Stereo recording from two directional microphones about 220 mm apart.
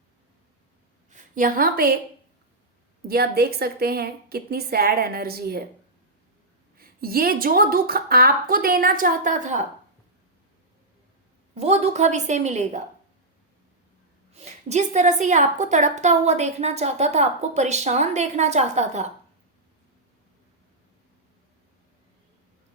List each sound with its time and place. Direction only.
1.1 s a woman's voice: 40° right (ahead or behind)
3.1 s a woman's voice: 45° right (ahead or behind)
6.7 s a woman's voice: 40° right (ahead or behind)
11.5 s a woman's voice: 30° right (ahead or behind)
14.3 s a woman's voice: 30° right (ahead or behind)